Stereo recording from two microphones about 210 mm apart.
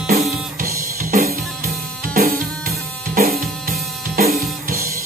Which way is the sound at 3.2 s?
40° right (ahead or behind).